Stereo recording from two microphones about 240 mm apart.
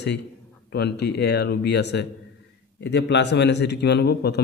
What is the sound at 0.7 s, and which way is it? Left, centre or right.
A man's voice, left.